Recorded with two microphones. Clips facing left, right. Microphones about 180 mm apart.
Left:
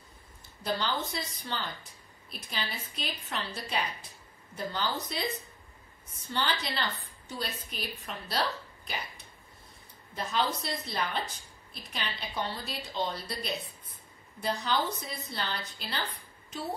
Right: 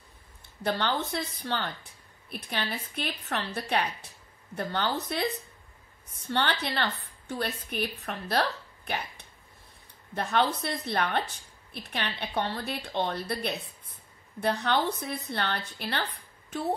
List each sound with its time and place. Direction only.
0.7 s a woman's voice: 60° right (ahead or behind)